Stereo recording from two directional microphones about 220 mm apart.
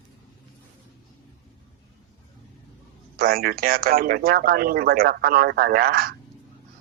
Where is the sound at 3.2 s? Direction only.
40° right (ahead or behind).